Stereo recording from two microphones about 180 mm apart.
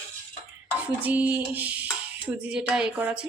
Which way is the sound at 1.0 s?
10° right (ahead or behind).